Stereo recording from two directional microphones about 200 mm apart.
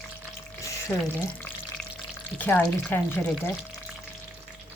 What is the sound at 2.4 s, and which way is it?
Speech, 10° left (ahead or behind).